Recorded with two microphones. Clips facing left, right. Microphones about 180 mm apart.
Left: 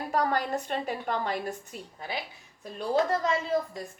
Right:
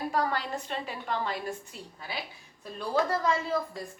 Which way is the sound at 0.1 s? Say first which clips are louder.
Left 6 dB; 50° left (ahead or behind).